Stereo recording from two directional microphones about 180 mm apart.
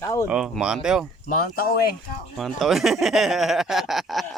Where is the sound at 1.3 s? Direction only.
55° left (ahead or behind).